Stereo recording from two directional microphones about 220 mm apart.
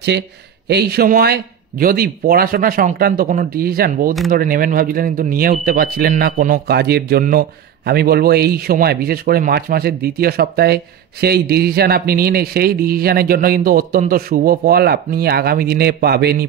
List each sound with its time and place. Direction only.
0.7 s a man's voice: 45° right (ahead or behind)